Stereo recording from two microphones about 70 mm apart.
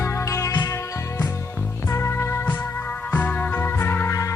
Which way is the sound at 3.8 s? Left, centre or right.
Left.